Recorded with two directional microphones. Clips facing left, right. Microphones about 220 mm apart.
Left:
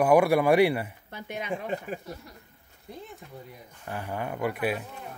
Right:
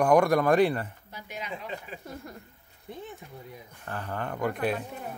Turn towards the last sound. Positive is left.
turn(degrees=5)  # may be behind; listen again after turning